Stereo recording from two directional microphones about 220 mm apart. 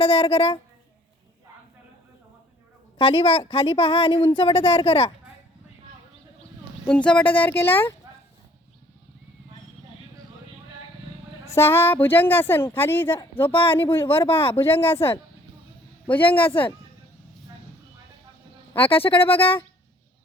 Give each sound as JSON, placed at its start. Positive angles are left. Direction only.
{"t": 0.0, "sound": "a woman's voice", "side_deg": 25}
{"t": 3.0, "sound": "a woman's voice", "side_deg": 25}
{"t": 6.8, "sound": "speech", "side_deg": 5}
{"t": 11.4, "sound": "speech", "side_deg": 10}
{"t": 13.5, "sound": "a woman's voice", "side_deg": 25}
{"t": 13.7, "sound": "speech", "side_deg": 10}
{"t": 14.3, "sound": "a woman's voice", "side_deg": 25}
{"t": 14.7, "sound": "speech", "side_deg": 10}
{"t": 16.2, "sound": "a woman's voice", "side_deg": 25}
{"t": 18.9, "sound": "a woman's voice", "side_deg": 25}